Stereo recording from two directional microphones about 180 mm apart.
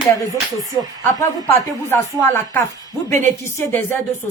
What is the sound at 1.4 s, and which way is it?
Speech, 15° left (ahead or behind).